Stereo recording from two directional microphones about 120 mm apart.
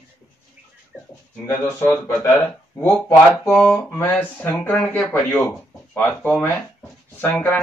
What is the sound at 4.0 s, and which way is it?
Speech, 15° left (ahead or behind).